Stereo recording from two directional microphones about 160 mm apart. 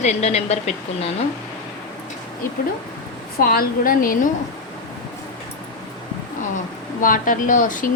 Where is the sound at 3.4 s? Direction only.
65° left (ahead or behind).